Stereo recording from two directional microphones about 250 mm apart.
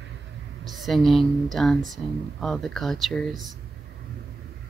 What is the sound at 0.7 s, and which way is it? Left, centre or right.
Speech, centre.